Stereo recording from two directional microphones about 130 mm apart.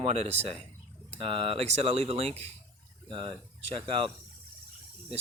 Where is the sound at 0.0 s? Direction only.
55° right (ahead or behind).